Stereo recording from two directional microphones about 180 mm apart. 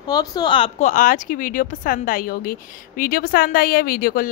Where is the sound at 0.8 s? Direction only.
45° left (ahead or behind).